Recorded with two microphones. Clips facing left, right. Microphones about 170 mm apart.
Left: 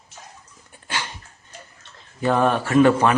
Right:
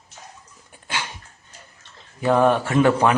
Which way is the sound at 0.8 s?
10° right (ahead or behind).